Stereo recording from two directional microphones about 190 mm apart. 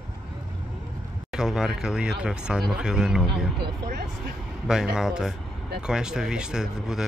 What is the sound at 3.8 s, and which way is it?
Speech, 50° right (ahead or behind).